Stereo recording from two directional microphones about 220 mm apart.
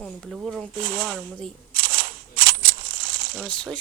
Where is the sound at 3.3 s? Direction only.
5° left (ahead or behind).